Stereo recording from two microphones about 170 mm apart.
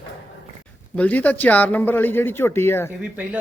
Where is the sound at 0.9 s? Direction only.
10° left (ahead or behind).